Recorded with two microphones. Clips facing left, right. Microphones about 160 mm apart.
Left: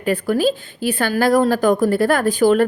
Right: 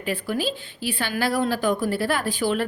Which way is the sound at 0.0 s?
45° left (ahead or behind).